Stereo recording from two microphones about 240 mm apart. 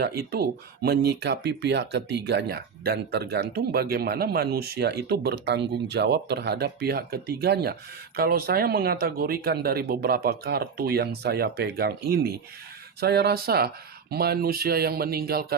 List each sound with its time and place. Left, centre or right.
0.0 s speech: right